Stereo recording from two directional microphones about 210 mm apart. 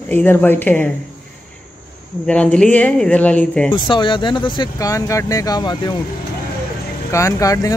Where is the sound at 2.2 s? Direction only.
5° left (ahead or behind).